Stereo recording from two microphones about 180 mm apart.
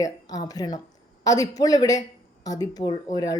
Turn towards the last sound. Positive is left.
turn(degrees=20)  # may be behind; listen again after turning